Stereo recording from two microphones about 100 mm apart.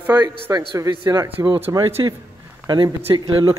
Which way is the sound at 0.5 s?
35° right (ahead or behind).